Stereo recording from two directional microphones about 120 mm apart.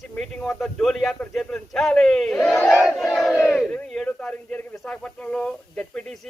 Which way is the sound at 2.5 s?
15° left (ahead or behind).